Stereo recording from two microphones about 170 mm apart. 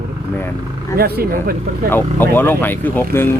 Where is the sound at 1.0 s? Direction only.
65° right (ahead or behind).